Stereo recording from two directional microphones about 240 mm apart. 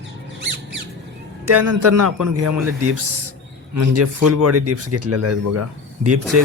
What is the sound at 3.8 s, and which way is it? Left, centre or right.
Speech, right.